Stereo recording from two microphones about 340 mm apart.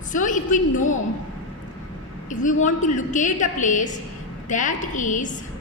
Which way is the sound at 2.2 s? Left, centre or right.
Left.